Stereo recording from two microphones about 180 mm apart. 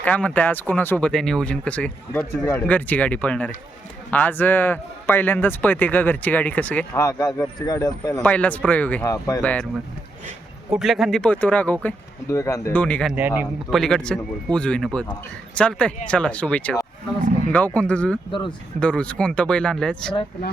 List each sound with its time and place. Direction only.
0.0 s speech: 10° left (ahead or behind)
8.2 s speech: 10° left (ahead or behind)
9.1 s speech: 20° left (ahead or behind)
9.4 s speech: 5° left (ahead or behind)
10.7 s speech: centre (ahead or behind)
13.1 s a man's voice: 10° right (ahead or behind)
13.7 s speech: centre (ahead or behind)
18.3 s speech: 25° left (ahead or behind)
18.8 s speech: 5° left (ahead or behind)